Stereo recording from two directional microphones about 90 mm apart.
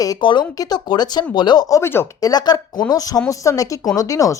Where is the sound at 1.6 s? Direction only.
35° left (ahead or behind).